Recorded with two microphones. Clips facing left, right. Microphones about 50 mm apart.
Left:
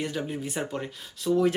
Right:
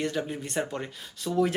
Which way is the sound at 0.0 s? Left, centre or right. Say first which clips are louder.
Right 1 dB; centre.